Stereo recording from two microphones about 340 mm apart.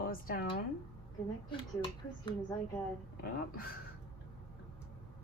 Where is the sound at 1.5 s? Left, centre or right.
Centre.